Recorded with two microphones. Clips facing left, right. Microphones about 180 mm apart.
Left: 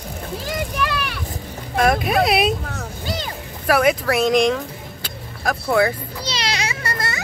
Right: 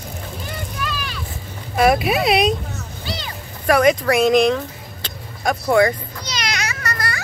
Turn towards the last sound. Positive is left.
turn(degrees=25)  # may be behind; listen again after turning